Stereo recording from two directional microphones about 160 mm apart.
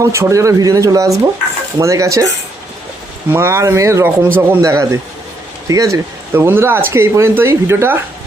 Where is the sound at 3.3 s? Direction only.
15° right (ahead or behind).